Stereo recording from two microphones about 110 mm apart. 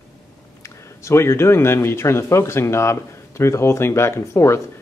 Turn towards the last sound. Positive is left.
turn(degrees=25)  # may be behind; listen again after turning